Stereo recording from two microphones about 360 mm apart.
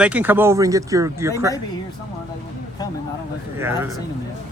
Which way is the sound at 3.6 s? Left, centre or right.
Centre.